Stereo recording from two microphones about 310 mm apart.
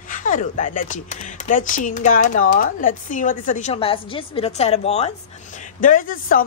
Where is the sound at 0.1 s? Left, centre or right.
Left.